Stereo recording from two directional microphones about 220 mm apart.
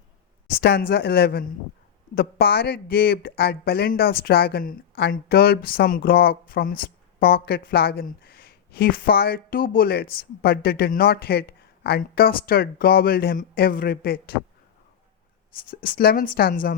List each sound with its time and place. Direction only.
0.4 s a woman's voice: 45° left (ahead or behind)
15.7 s a woman's voice: 40° left (ahead or behind)